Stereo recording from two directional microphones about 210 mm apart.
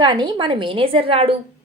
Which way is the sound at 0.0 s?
20° right (ahead or behind).